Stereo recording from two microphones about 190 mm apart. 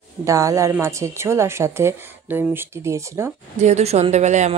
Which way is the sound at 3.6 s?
35° right (ahead or behind).